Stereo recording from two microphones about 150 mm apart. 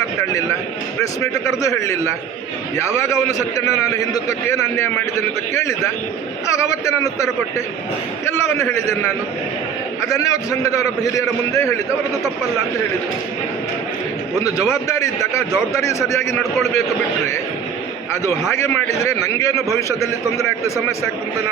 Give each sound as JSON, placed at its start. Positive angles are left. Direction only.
{"t": 1.6, "sound": "a man's voice", "side_deg": 20}
{"t": 8.3, "sound": "a man's voice", "side_deg": 20}
{"t": 10.1, "sound": "a man's voice", "side_deg": 20}
{"t": 14.4, "sound": "a man's voice", "side_deg": 20}
{"t": 16.4, "sound": "a man's voice", "side_deg": 0}
{"t": 18.2, "sound": "a man's voice", "side_deg": 20}